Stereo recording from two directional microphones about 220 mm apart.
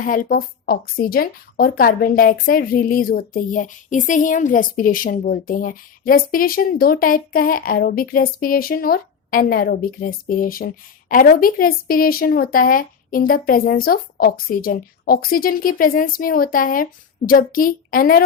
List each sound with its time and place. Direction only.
0.0 s a woman's voice: 40° left (ahead or behind)